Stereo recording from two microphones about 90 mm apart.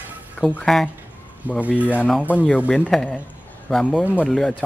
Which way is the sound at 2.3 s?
20° left (ahead or behind).